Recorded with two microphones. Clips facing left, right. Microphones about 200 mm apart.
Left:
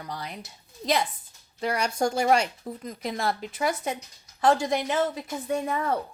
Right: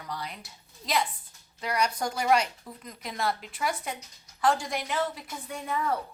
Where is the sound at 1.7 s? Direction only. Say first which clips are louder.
Left 3 dB; 30° left (ahead or behind).